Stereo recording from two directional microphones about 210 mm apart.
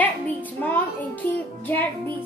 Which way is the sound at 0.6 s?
10° left (ahead or behind).